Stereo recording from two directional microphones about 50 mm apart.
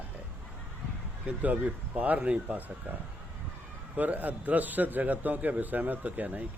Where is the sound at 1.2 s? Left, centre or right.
Right.